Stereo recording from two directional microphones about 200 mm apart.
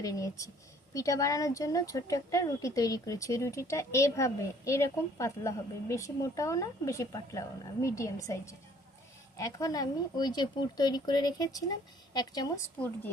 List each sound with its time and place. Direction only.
0.0 s a woman's voice: 15° left (ahead or behind)
12.7 s speech: 10° left (ahead or behind)